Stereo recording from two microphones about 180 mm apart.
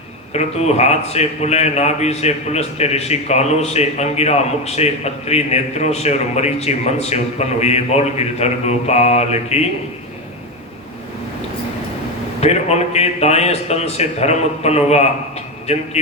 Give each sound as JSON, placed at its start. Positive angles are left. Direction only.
{"t": 0.3, "sound": "a man's voice", "side_deg": 35}
{"t": 12.4, "sound": "a man's voice", "side_deg": 35}